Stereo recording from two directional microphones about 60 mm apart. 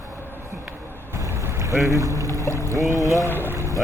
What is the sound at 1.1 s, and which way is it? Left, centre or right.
Boat, right.